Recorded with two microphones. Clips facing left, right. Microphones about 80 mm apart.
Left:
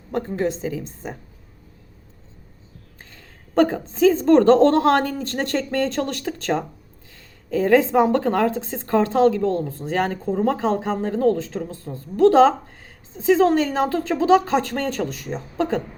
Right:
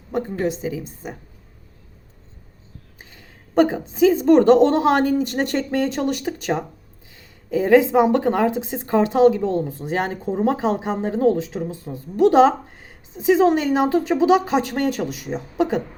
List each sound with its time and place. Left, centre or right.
0.1 s a woman's voice: centre
3.0 s a woman's voice: centre